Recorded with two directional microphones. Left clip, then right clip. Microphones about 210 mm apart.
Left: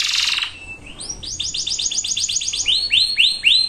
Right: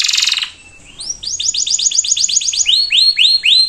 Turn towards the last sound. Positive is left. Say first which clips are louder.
# right 5 dB
turn(degrees=-20)  # may be behind; listen again after turning